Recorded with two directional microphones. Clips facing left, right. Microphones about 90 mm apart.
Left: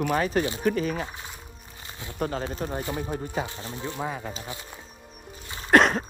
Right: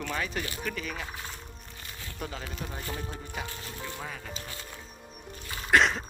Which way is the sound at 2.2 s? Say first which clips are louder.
Left 10 dB; 45° left (ahead or behind).